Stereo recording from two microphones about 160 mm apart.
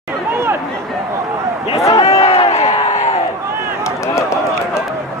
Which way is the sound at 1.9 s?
40° left (ahead or behind).